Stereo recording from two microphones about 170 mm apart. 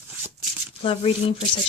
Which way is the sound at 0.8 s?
35° left (ahead or behind).